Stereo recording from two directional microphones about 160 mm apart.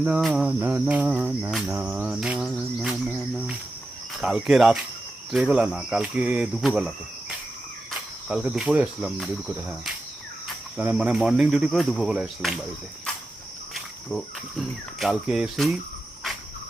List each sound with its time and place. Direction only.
0.0 s speech: 5° right (ahead or behind)
0.6 s cricket: 10° right (ahead or behind)
4.2 s speech: centre (ahead or behind)
8.3 s speech: 5° right (ahead or behind)
13.7 s speech: centre (ahead or behind)